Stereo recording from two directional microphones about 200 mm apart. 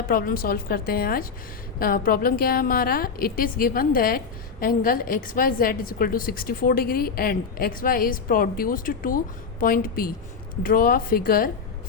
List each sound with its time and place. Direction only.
0.1 s a woman's voice: 45° left (ahead or behind)